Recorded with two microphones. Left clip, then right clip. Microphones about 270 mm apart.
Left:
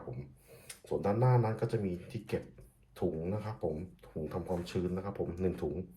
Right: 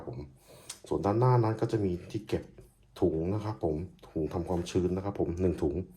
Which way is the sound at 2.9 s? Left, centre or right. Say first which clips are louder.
Right 6 dB; right.